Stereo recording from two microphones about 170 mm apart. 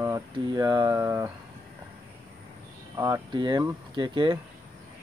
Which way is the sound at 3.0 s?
25° right (ahead or behind).